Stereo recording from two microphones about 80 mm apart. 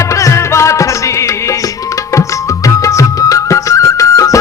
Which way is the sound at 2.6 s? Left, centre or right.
Left.